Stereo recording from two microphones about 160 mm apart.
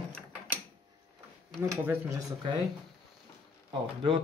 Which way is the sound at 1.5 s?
15° right (ahead or behind).